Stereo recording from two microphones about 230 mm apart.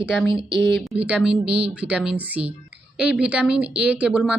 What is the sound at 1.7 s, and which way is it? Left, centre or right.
Speech, centre.